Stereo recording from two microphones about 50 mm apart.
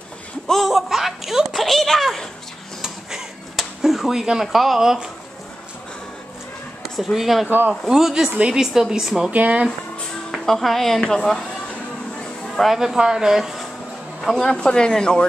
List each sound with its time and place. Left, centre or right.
0.5 s speech: centre
3.5 s speech: centre
6.8 s speech: centre
9.3 s speech: right
10.4 s speech: centre
12.4 s speech: centre
14.3 s speech: centre